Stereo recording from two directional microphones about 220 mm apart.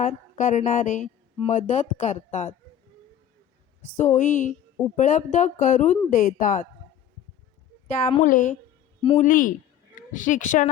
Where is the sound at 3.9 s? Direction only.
35° left (ahead or behind).